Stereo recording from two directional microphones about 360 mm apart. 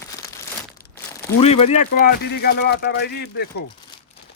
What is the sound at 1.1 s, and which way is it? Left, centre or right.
Speech, centre.